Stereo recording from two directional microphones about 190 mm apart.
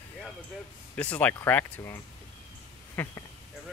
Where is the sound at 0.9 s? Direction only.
10° left (ahead or behind).